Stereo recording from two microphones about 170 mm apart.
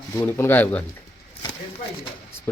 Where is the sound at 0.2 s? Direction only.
15° left (ahead or behind).